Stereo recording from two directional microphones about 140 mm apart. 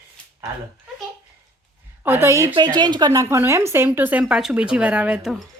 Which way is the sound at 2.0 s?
15° right (ahead or behind).